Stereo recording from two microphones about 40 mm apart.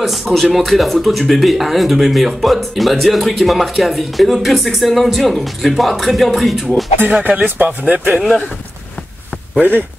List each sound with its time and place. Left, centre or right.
0.0 s speech: centre
0.3 s speech: centre
7.1 s speech: right